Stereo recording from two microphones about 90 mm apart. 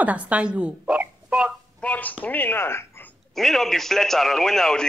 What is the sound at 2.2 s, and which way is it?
Speech, 20° left (ahead or behind).